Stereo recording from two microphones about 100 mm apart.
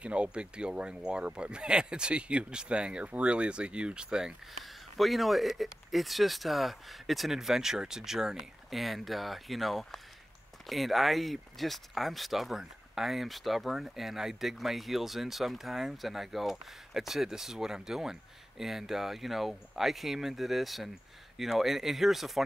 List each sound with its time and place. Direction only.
0.0 s speech: 10° right (ahead or behind)